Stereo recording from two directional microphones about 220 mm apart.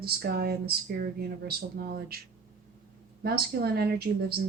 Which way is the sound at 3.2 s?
45° right (ahead or behind).